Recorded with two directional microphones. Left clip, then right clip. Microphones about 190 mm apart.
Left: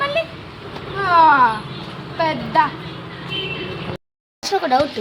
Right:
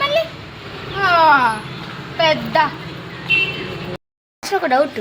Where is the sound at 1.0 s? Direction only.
30° right (ahead or behind).